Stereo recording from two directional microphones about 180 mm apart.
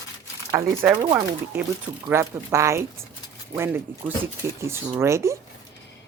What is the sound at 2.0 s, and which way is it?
Speech, 15° right (ahead or behind).